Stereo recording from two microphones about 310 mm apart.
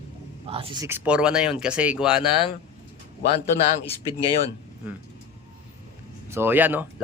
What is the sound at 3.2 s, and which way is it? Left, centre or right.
Speech, centre.